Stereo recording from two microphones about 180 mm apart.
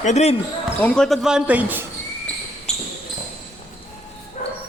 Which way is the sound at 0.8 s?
5° left (ahead or behind).